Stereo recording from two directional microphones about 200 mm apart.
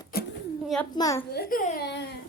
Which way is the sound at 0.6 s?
Centre (ahead or behind).